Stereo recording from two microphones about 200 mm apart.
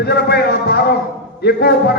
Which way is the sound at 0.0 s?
55° left (ahead or behind).